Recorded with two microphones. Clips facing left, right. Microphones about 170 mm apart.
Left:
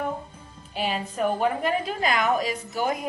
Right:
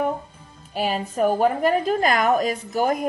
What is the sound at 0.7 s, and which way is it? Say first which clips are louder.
A woman's voice: right 4 dB; 40° right (ahead or behind).